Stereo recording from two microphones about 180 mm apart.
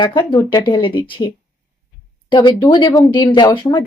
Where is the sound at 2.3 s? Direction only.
25° left (ahead or behind).